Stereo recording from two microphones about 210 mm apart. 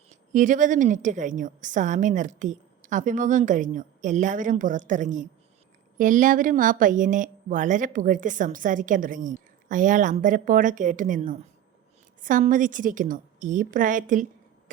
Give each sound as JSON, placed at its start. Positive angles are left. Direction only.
{"t": 0.1, "sound": "a woman's voice", "side_deg": -40}